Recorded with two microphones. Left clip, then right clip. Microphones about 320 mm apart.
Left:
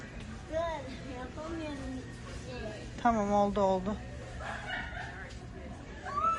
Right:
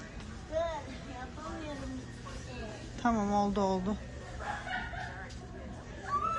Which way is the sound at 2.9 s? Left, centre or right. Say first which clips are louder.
Left 3 dB; centre.